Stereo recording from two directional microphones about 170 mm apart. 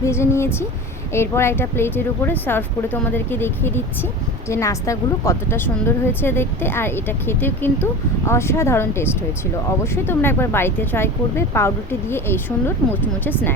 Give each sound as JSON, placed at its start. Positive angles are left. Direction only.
{"t": 0.0, "sound": "speech", "side_deg": 15}